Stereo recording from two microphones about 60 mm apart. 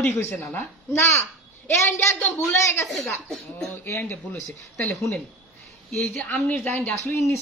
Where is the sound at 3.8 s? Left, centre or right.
Left.